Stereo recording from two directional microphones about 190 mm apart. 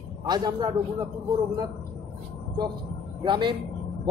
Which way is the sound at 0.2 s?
20° right (ahead or behind).